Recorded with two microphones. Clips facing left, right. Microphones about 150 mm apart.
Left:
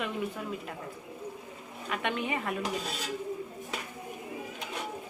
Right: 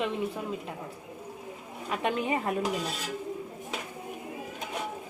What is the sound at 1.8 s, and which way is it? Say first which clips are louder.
Speech: right 3 dB; 35° right (ahead or behind).